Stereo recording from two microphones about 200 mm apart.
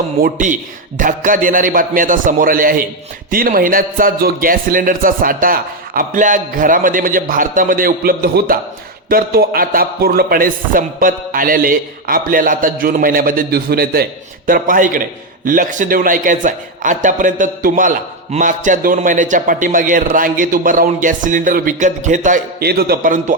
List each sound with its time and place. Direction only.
0.2 s a man's voice: 40° right (ahead or behind)